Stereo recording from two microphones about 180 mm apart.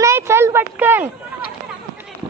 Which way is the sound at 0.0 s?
15° right (ahead or behind).